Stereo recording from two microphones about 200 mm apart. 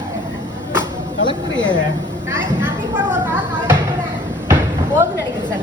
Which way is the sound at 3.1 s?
10° right (ahead or behind).